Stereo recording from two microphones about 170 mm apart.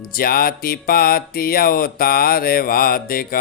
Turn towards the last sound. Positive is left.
turn(degrees=60)  # may be behind; listen again after turning